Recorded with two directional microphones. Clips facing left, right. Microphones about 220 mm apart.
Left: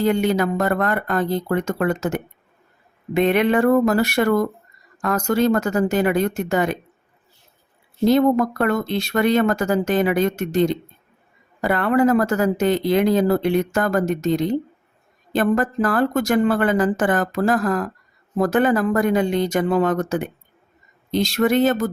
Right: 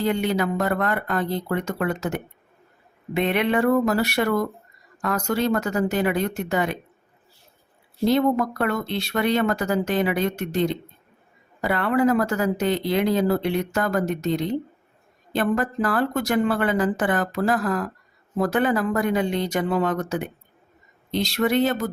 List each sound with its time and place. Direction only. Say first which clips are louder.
0.0 s speech: left 4 dB; 45° left (ahead or behind)
8.0 s speech: left 4 dB; 45° left (ahead or behind)